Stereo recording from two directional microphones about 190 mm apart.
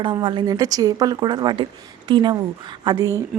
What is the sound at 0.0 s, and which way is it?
A woman's voice, 25° right (ahead or behind).